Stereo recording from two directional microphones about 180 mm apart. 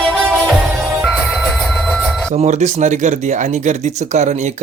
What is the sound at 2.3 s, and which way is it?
Speech, 40° right (ahead or behind).